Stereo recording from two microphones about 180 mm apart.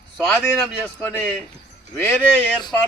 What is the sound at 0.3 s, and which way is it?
Speech, centre (ahead or behind).